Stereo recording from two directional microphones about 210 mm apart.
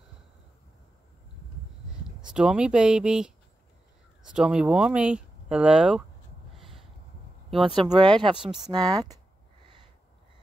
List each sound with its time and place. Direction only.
2.0 s speech: 5° right (ahead or behind)
7.6 s speech: 25° right (ahead or behind)
8.4 s speech: 5° right (ahead or behind)
8.6 s speech: 20° right (ahead or behind)